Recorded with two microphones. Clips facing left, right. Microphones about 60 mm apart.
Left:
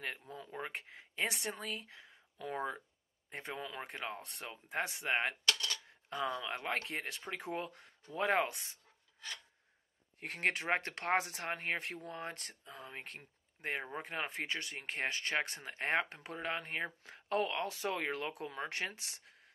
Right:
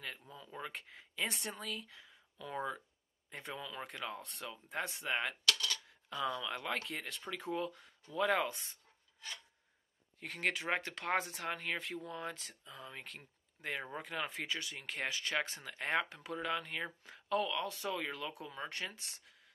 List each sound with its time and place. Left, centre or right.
0.5 s speech: left
1.2 s a woman's voice: left
1.5 s speech: left
5.0 s cutlery: left
6.8 s speech: left
8.4 s a woman's voice: left
10.2 s speech: left
12.0 s speech: left
13.0 s speech: left
14.8 s speech: left
15.8 s speech: left